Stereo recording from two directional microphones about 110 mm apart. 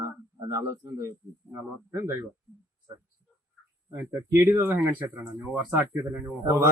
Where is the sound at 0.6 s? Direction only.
30° right (ahead or behind).